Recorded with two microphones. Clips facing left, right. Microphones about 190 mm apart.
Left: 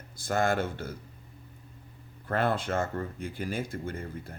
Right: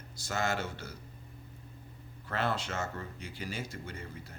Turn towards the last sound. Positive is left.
turn(degrees=55)  # may be behind; listen again after turning